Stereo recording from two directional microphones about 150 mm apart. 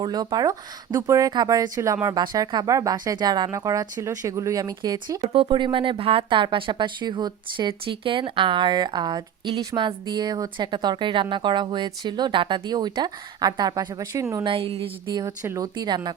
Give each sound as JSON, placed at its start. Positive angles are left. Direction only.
{"t": 0.0, "sound": "speech", "side_deg": -25}
{"t": 5.2, "sound": "speech", "side_deg": -40}
{"t": 5.5, "sound": "speech", "side_deg": -30}
{"t": 14.4, "sound": "speech", "side_deg": -40}